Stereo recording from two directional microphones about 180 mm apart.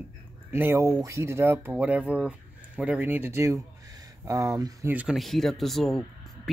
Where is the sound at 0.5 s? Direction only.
10° right (ahead or behind).